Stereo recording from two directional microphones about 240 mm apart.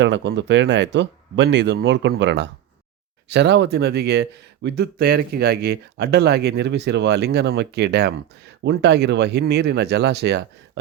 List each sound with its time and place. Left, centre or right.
0.0 s speech: right